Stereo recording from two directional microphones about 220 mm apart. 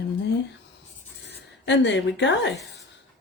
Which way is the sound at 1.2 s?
55° left (ahead or behind).